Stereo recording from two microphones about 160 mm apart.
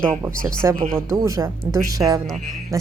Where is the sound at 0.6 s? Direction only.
20° right (ahead or behind).